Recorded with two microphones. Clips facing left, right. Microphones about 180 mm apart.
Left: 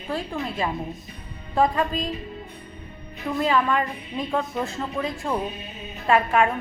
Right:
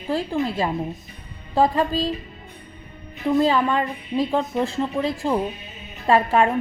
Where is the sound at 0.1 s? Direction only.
30° right (ahead or behind).